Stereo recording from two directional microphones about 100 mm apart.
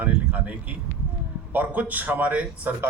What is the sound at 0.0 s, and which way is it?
A man's voice, 15° right (ahead or behind).